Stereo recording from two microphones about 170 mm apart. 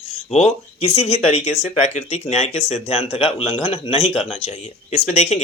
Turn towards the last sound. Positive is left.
turn(degrees=40)  # may be behind; listen again after turning